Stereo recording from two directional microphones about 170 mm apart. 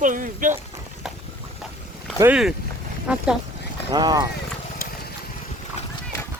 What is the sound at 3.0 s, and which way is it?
Speech, 5° right (ahead or behind).